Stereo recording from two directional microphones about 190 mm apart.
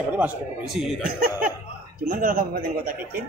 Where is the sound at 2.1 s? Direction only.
45° right (ahead or behind).